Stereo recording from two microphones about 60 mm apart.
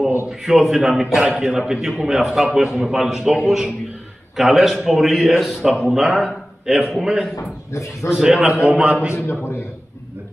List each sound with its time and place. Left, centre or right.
0.3 s a man's voice: centre
7.7 s speech: left
8.1 s a man's voice: centre
9.1 s a man's voice: left